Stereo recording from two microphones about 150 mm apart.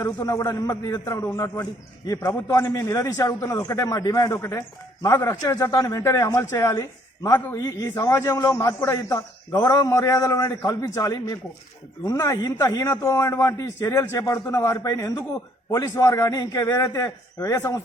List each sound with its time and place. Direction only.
0.0 s a man's voice: 20° left (ahead or behind)